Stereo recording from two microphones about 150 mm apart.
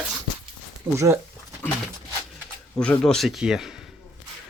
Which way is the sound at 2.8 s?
5° left (ahead or behind).